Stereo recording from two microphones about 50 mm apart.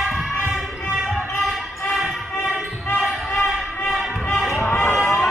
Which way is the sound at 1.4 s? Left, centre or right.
Centre.